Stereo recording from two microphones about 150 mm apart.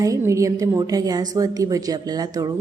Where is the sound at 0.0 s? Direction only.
20° right (ahead or behind).